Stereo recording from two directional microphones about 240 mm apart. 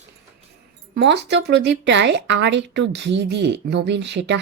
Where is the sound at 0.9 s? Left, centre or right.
Right.